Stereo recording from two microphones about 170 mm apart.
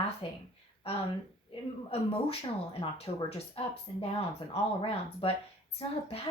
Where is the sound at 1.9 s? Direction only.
35° left (ahead or behind).